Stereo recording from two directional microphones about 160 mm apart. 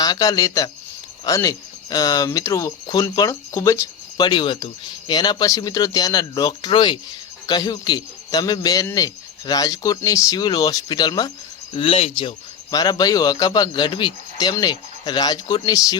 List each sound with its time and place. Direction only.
0.0 s speech: 25° left (ahead or behind); by 12.3 s 40° left (ahead or behind)
12.7 s speech: 25° left (ahead or behind)